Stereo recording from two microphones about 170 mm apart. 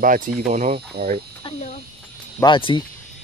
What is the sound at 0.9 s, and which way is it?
Speech, 65° right (ahead or behind).